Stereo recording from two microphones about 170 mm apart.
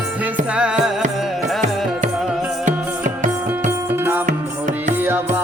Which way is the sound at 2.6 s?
50° right (ahead or behind).